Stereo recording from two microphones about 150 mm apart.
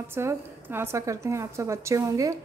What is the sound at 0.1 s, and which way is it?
A woman's voice, 15° right (ahead or behind).